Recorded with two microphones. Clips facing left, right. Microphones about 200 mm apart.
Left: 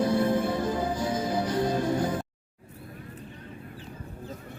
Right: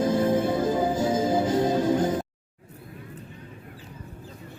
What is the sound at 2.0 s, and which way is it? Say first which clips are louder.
Music: right 4 dB; 20° right (ahead or behind).